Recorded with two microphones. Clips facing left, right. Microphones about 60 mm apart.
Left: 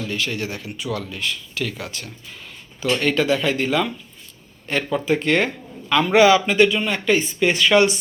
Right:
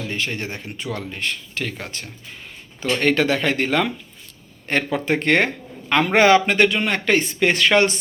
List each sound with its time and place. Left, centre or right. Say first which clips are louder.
0.1 s speech: left 1 dB; right
3.0 s speech: right 2 dB; right